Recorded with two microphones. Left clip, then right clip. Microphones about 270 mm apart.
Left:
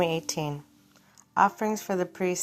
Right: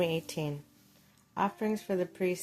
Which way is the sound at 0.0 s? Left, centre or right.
Centre.